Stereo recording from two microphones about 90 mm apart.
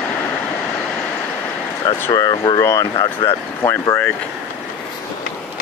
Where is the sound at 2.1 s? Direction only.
45° left (ahead or behind).